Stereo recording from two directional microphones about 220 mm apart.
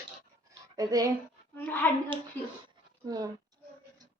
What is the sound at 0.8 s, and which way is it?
Mantra, 15° right (ahead or behind).